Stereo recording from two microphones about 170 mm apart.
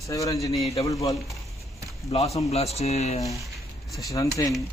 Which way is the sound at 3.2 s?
20° left (ahead or behind).